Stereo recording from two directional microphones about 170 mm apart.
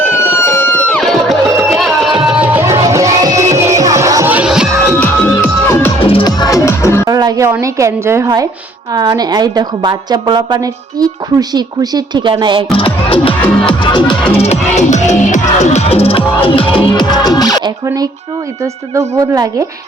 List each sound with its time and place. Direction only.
0.3 s music: 15° left (ahead or behind); by 4.7 s 5° right (ahead or behind)
4.9 s music: 15° left (ahead or behind)
6.0 s music: 30° left (ahead or behind)
7.0 s a woman's voice: 20° right (ahead or behind)
12.7 s music: 30° left (ahead or behind)
14.4 s music: 40° left (ahead or behind); by 17.6 s 25° left (ahead or behind)
17.8 s a woman's voice: 20° right (ahead or behind)